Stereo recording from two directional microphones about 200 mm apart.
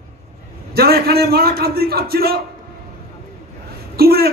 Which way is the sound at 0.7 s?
50° right (ahead or behind).